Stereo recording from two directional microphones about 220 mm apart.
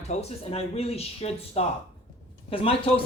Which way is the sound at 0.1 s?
30° left (ahead or behind).